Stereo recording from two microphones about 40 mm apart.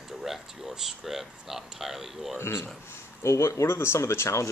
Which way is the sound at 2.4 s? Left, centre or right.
Left.